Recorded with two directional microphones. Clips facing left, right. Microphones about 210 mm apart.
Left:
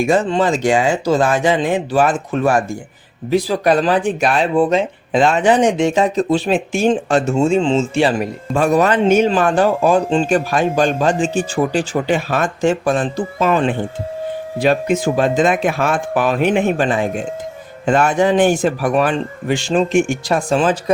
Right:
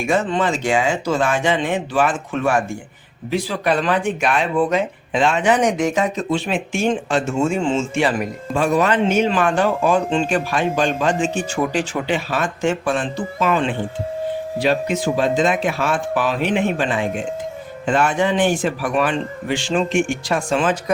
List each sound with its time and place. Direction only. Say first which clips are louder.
0.1 s speech: left 4 dB; 35° left (ahead or behind)
8.5 s speech: left 3 dB; 40° left (ahead or behind)
12.1 s speech: left 2 dB; 45° left (ahead or behind)